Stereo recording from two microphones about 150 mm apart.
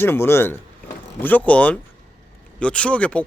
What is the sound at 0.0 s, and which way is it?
Speech, 15° left (ahead or behind).